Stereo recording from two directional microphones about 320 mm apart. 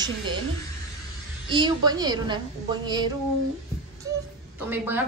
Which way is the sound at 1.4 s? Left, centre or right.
Centre.